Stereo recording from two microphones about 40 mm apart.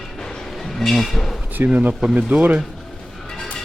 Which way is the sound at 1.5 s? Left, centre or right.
Right.